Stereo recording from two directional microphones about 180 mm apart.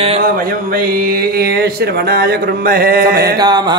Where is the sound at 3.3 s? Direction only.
20° right (ahead or behind).